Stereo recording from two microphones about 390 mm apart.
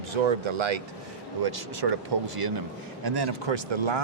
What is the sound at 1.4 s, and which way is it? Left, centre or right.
A man's voice, right.